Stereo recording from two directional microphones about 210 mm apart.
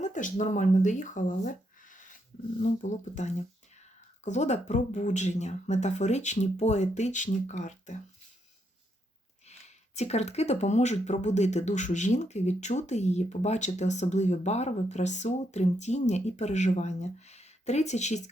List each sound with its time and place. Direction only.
0.0 s speech: 35° left (ahead or behind)
9.5 s speech: 30° left (ahead or behind)